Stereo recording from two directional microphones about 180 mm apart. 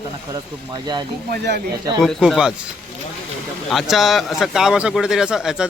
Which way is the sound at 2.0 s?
Centre (ahead or behind).